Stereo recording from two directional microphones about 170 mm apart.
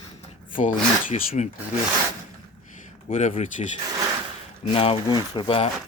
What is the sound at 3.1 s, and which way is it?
Speech, 45° left (ahead or behind).